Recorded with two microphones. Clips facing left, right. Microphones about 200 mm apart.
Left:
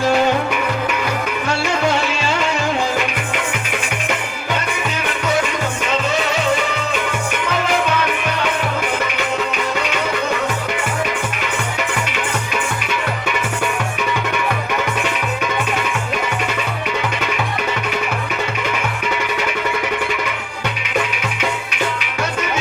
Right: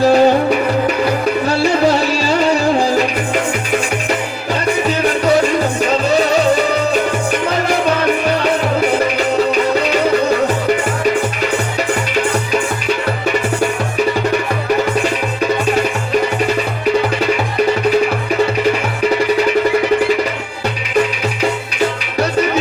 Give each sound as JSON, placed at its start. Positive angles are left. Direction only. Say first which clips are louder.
{"t": 0.0, "sound": "music", "louder": "right 6 dB", "side_deg": -35}
{"t": 5.0, "sound": "music", "louder": "right 7 dB", "side_deg": -35}
{"t": 14.1, "sound": "music", "louder": "right 6 dB", "side_deg": -35}